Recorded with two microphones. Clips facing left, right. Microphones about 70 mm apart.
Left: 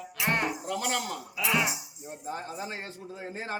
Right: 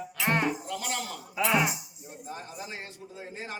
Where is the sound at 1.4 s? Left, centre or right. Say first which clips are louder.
Right 3 dB; right.